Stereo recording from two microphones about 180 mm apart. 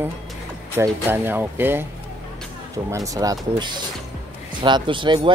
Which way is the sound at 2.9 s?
20° right (ahead or behind).